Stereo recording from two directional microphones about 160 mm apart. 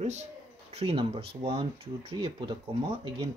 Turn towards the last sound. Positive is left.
turn(degrees=-30)  # may be behind; listen again after turning